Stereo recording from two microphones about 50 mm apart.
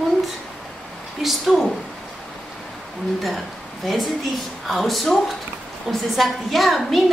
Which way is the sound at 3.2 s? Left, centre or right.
Centre.